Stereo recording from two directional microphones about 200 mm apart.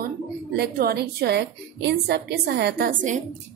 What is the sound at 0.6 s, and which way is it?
A woman's voice, 50° right (ahead or behind).